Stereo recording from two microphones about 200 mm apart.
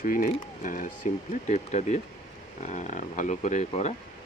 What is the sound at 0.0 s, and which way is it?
Speech, 45° left (ahead or behind).